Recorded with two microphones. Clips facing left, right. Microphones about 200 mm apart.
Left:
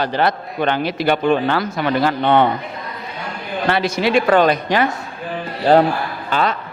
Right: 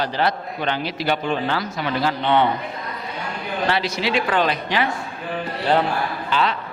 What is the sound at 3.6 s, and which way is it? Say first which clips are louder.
A man's voice: left 5 dB; 50° left (ahead or behind).